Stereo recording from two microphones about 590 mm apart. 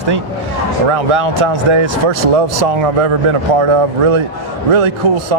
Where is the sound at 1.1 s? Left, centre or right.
Right.